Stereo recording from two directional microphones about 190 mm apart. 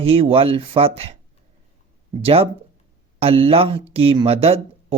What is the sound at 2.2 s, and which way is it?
Speech, 30° right (ahead or behind).